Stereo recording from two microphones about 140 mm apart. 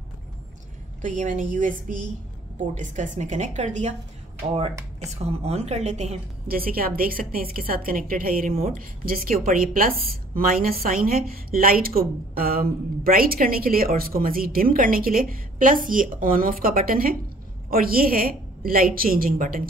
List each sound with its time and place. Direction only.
1.0 s a woman's voice: 65° right (ahead or behind)
2.7 s a woman's voice: 60° right (ahead or behind)
5.0 s a woman's voice: 50° right (ahead or behind)
6.4 s a woman's voice: 90° right